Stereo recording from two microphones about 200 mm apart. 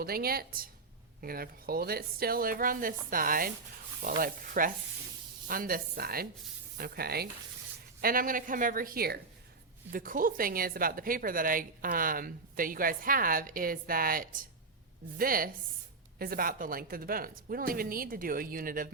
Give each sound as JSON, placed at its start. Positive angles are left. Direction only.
{"t": 0.0, "sound": "a woman's voice", "side_deg": -50}